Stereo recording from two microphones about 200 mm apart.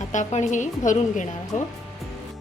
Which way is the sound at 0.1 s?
35° left (ahead or behind).